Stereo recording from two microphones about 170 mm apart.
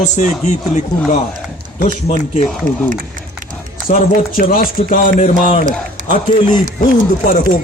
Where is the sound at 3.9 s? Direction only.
55° left (ahead or behind).